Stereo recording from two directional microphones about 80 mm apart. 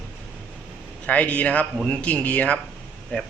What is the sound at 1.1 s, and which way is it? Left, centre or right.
Speech, centre.